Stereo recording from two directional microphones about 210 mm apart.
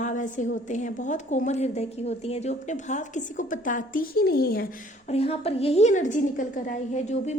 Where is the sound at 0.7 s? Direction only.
35° left (ahead or behind).